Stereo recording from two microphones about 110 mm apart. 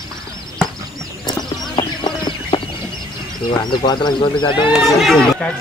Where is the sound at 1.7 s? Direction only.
45° left (ahead or behind).